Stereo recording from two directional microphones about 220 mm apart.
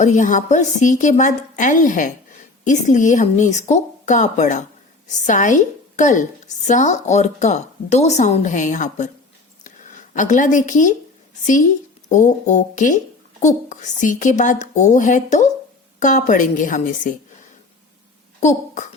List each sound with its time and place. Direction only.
0.0 s a woman's voice: 35° left (ahead or behind)
9.6 s a sound: 35° left (ahead or behind)
11.4 s a woman's voice: 35° left (ahead or behind)
18.3 s a child's voice: 35° left (ahead or behind)